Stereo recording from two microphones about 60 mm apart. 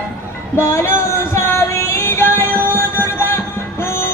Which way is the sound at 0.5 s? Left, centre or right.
Left.